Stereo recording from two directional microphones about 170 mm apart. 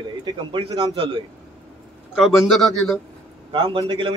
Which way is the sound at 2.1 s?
Centre (ahead or behind).